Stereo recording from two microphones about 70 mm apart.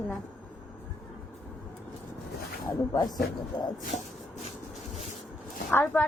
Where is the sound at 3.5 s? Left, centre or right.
Left.